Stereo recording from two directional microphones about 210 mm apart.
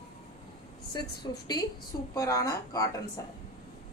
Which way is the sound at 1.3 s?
20° left (ahead or behind).